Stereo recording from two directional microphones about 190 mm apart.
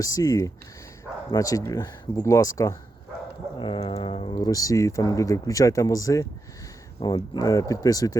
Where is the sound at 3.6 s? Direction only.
30° left (ahead or behind).